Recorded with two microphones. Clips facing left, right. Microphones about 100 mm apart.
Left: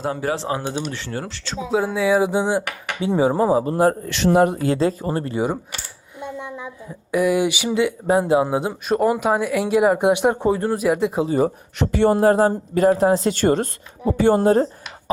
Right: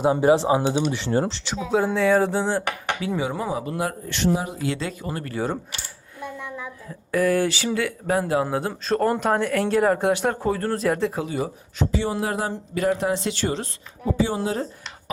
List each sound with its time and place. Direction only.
0.0 s speech: 20° right (ahead or behind)
1.7 s a woman's voice: 5° left (ahead or behind)
3.0 s speech: 30° left (ahead or behind)
4.0 s speech: 80° left; by 4.6 s 60° left (ahead or behind)
4.6 s a woman's voice: 35° left (ahead or behind); by 11.2 s 10° left (ahead or behind)
11.2 s speech: 35° left (ahead or behind)
11.8 s speech: 60° left (ahead or behind)